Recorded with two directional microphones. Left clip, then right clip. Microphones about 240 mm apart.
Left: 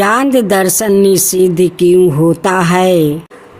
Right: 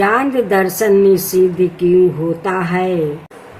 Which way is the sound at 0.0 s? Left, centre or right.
Left.